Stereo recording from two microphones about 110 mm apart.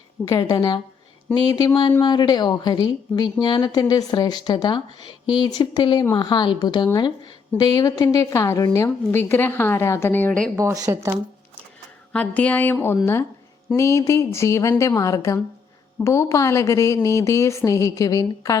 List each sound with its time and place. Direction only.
0.3 s a woman's voice: 35° left (ahead or behind); by 10.5 s 10° left (ahead or behind)
10.6 s speech: 30° right (ahead or behind)
12.1 s speech: 10° left (ahead or behind)
13.7 s a woman's voice: 30° left (ahead or behind)